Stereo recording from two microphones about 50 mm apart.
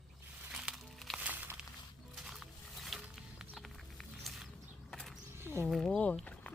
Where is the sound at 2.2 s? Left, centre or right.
Centre.